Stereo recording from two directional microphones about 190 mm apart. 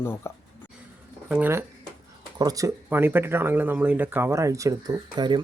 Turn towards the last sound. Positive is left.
turn(degrees=-25)  # may be behind; listen again after turning